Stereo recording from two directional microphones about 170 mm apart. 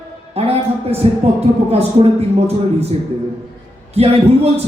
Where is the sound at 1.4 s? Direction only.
35° right (ahead or behind).